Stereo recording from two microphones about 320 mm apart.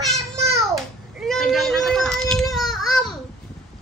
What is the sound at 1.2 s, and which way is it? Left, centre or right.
Baby cry, centre.